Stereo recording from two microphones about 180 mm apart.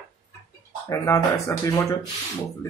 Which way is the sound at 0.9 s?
15° left (ahead or behind).